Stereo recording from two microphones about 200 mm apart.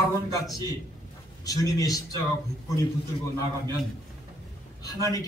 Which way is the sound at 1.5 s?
15° left (ahead or behind).